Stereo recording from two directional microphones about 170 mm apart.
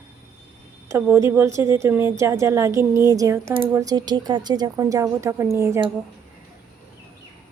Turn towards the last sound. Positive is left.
turn(degrees=-15)  # may be behind; listen again after turning